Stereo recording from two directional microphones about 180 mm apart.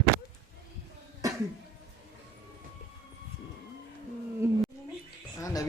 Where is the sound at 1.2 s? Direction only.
20° right (ahead or behind).